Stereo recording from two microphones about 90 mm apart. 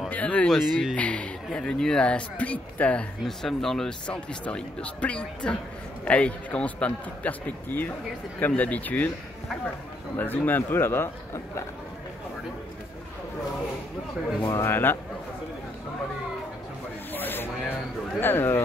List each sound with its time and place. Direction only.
0.1 s speech: 15° left (ahead or behind)
0.5 s speech: centre (ahead or behind)
0.9 s speech: 15° left (ahead or behind)
10.1 s a man's voice: 20° left (ahead or behind)
14.6 s a man's voice: 25° left (ahead or behind)
17.1 s a sound: 20° left (ahead or behind)
18.2 s a man's voice: 25° left (ahead or behind)